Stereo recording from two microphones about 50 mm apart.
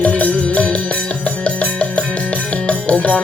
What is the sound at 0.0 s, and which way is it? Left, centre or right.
Music, left.